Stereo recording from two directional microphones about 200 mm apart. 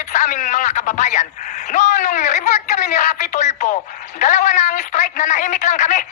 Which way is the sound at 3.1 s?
35° left (ahead or behind).